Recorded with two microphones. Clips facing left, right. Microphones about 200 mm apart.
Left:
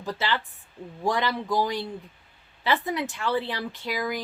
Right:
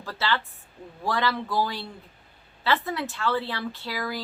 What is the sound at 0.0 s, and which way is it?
A woman's voice, 15° left (ahead or behind).